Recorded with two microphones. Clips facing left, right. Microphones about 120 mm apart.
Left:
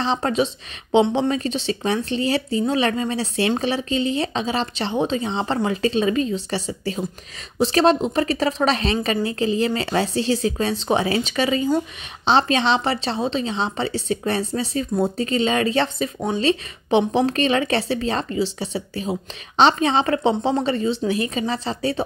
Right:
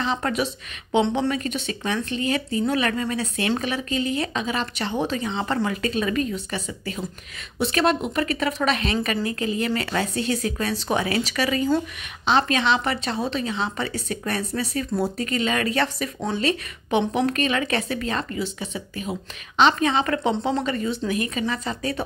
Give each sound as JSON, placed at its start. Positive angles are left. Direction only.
{"t": 0.0, "sound": "speech", "side_deg": 30}